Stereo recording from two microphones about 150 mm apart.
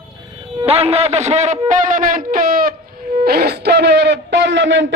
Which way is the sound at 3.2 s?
90° right.